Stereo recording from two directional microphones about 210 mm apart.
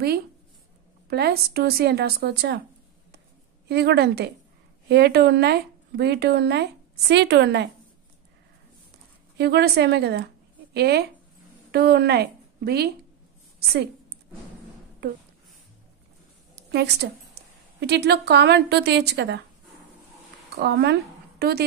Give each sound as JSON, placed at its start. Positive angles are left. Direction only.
{"t": 1.0, "sound": "speech", "side_deg": -50}
{"t": 3.6, "sound": "speech", "side_deg": -50}
{"t": 9.4, "sound": "a woman's voice", "side_deg": -50}
{"t": 15.0, "sound": "speech", "side_deg": -45}
{"t": 16.7, "sound": "speech", "side_deg": -50}
{"t": 20.5, "sound": "speech", "side_deg": -50}